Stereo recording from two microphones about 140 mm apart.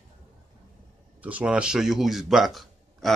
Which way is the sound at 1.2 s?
10° right (ahead or behind).